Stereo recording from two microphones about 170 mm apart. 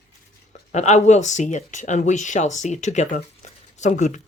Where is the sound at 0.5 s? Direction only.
40° left (ahead or behind).